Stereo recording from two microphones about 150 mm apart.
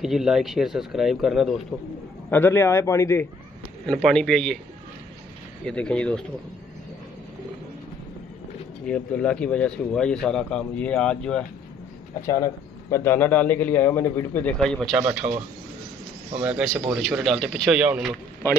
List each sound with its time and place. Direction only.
0.0 s speech: 5° right (ahead or behind)
2.3 s speech: 15° left (ahead or behind)
3.8 s speech: 5° left (ahead or behind)
5.7 s speech: 5° left (ahead or behind)
8.8 s speech: 5° left (ahead or behind)
12.3 s speech: 25° left (ahead or behind)
14.6 s speech: centre (ahead or behind)
15.2 s speech: 35° right (ahead or behind)
16.3 s speech: 5° right (ahead or behind)